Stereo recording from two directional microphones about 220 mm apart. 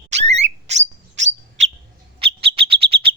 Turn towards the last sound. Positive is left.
turn(degrees=-25)  # may be behind; listen again after turning